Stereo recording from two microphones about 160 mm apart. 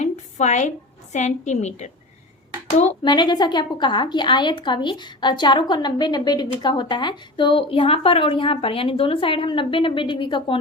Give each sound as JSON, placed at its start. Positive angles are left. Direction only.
{"t": 0.0, "sound": "a sound", "side_deg": 45}
{"t": 1.1, "sound": "a woman's voice", "side_deg": 45}
{"t": 3.0, "sound": "a woman's voice", "side_deg": 30}